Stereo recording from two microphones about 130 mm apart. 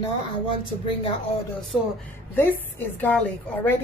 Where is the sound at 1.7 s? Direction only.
5° right (ahead or behind).